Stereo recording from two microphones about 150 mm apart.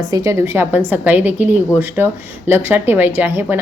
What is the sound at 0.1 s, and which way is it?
A woman's voice, 20° right (ahead or behind).